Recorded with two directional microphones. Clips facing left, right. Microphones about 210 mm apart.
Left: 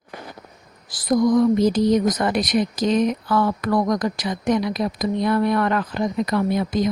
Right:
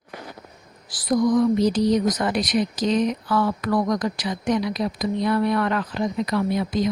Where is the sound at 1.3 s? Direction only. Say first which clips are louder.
Left 2 dB; 55° left (ahead or behind).